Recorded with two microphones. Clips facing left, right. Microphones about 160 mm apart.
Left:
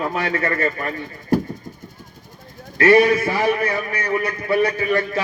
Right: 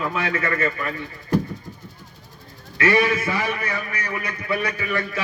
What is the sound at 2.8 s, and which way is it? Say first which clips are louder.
A man's voice: left 6 dB; 40° left (ahead or behind).